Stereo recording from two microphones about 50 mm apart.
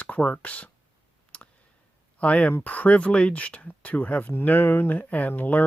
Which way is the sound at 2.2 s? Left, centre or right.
Left.